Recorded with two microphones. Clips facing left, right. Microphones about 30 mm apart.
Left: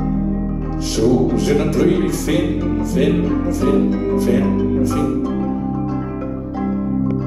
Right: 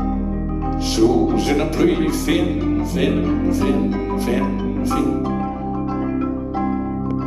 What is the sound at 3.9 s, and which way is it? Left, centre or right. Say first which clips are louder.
Speech: left 4 dB; right.